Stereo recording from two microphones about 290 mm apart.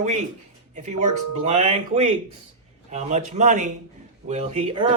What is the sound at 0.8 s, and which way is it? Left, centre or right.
Speech, right.